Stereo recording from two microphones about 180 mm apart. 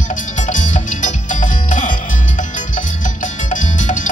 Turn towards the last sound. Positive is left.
turn(degrees=45)  # may be behind; listen again after turning